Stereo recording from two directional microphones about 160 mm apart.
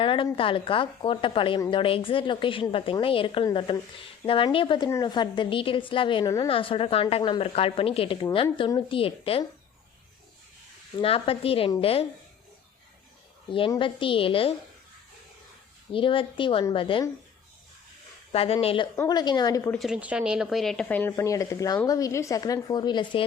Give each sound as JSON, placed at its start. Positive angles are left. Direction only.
{"t": 0.0, "sound": "a woman's voice", "side_deg": 30}
{"t": 6.2, "sound": "a woman's voice", "side_deg": 20}
{"t": 6.5, "sound": "a woman's voice", "side_deg": 35}
{"t": 11.0, "sound": "a woman's voice", "side_deg": 35}
{"t": 13.7, "sound": "a woman's voice", "side_deg": 30}
{"t": 15.9, "sound": "a woman's voice", "side_deg": 35}
{"t": 18.3, "sound": "a woman's voice", "side_deg": 35}
{"t": 19.7, "sound": "a woman's voice", "side_deg": 0}